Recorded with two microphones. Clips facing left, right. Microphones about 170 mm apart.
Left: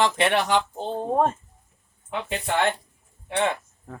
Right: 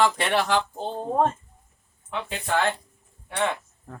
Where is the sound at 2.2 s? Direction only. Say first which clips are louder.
Left 1 dB; 20° left (ahead or behind).